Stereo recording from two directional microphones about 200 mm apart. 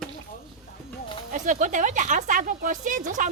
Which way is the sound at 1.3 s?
40° right (ahead or behind).